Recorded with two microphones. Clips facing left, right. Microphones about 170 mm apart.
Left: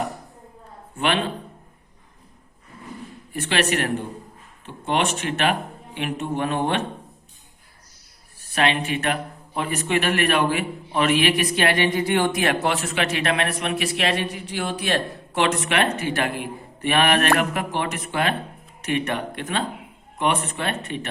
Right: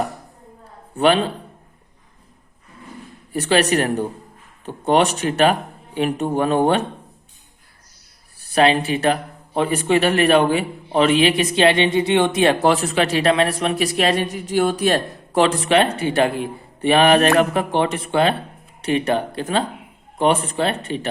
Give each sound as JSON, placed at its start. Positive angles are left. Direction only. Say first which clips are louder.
{"t": 0.9, "sound": "a man's voice", "louder": "right 7 dB", "side_deg": -35}
{"t": 3.3, "sound": "a man's voice", "louder": "right 6 dB", "side_deg": -35}
{"t": 8.4, "sound": "a man's voice", "louder": "right 6 dB", "side_deg": -35}